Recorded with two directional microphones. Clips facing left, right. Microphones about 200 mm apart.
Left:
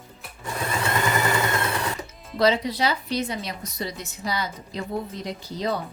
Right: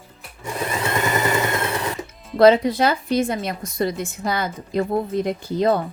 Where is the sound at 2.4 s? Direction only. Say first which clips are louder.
Right 8 dB; 55° right (ahead or behind).